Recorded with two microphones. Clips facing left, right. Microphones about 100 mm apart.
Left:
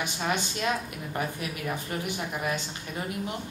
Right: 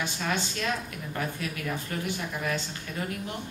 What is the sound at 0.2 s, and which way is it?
Speech, 20° left (ahead or behind).